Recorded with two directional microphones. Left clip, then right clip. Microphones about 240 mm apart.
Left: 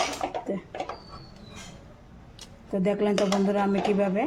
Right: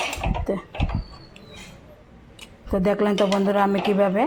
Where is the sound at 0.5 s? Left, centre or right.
Centre.